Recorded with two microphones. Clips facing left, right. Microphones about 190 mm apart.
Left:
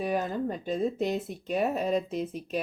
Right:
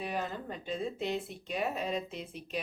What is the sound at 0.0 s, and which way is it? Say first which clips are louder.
Speech: left 8 dB; 45° left (ahead or behind).